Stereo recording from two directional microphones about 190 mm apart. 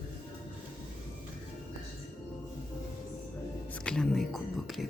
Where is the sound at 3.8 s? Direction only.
5° left (ahead or behind).